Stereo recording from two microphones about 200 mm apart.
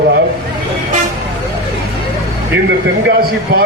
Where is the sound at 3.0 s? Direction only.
50° right (ahead or behind).